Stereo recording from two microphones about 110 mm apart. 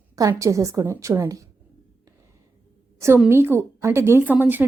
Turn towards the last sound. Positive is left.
turn(degrees=-15)  # may be behind; listen again after turning